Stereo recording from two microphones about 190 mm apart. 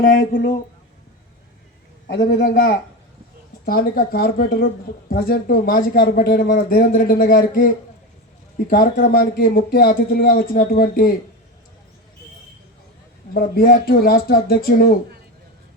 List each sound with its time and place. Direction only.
0.0 s speech: 45° left (ahead or behind)
2.0 s a man's voice: 60° left (ahead or behind)
13.3 s speech: 50° left (ahead or behind)